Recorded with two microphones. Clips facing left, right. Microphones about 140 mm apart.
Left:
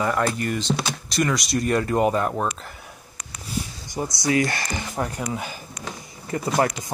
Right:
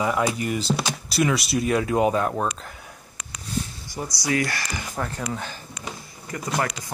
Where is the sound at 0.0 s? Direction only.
10° right (ahead or behind).